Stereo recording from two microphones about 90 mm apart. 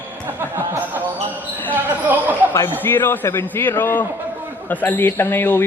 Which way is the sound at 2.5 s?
30° left (ahead or behind).